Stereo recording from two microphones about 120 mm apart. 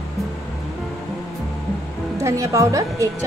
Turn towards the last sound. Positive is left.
turn(degrees=-25)  # may be behind; listen again after turning